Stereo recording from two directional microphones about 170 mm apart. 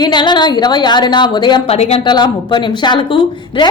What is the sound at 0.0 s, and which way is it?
A woman's voice, 25° left (ahead or behind).